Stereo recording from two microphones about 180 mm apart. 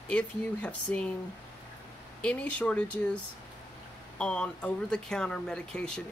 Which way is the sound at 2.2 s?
5° left (ahead or behind).